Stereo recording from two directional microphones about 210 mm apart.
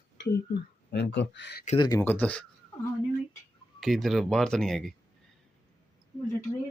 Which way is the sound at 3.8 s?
Centre (ahead or behind).